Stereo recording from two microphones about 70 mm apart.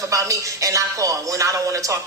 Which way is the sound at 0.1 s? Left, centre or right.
Right.